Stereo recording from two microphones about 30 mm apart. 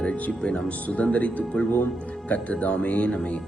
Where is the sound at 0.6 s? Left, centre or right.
Left.